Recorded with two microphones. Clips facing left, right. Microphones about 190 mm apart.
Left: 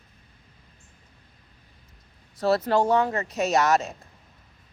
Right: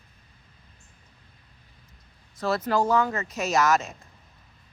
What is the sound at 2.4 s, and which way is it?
Speech, 35° left (ahead or behind).